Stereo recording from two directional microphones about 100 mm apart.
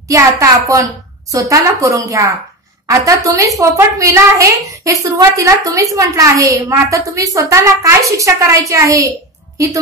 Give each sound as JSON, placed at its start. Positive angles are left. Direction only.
{"t": 0.1, "sound": "a woman's voice", "side_deg": -30}